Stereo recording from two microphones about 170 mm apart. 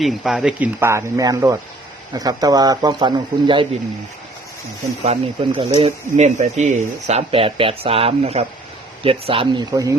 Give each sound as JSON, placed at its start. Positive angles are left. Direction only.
{"t": 0.0, "sound": "speech", "side_deg": 0}
{"t": 5.0, "sound": "speech", "side_deg": -35}